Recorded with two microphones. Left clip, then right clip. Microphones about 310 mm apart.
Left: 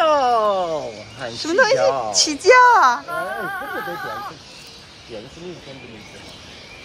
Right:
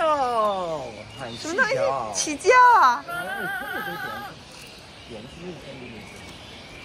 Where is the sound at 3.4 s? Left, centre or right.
Centre.